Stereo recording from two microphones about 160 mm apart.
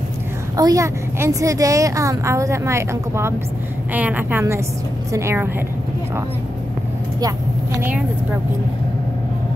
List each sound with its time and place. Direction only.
0.6 s a woman's voice: 20° right (ahead or behind)